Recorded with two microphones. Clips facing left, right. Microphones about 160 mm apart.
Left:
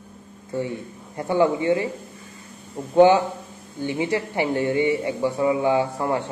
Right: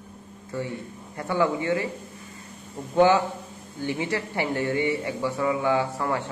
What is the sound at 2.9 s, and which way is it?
Speech, 20° left (ahead or behind).